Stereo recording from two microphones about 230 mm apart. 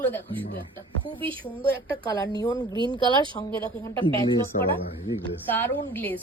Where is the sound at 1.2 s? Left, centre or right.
Right.